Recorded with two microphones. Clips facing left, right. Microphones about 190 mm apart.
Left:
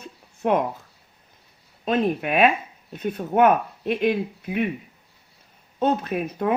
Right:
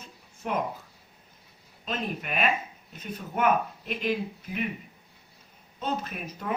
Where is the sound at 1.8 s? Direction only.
60° left (ahead or behind).